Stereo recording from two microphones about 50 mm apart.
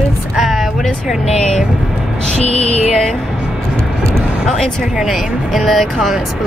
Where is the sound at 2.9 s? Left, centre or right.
Centre.